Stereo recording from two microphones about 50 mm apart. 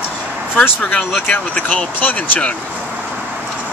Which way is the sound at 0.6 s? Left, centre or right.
Left.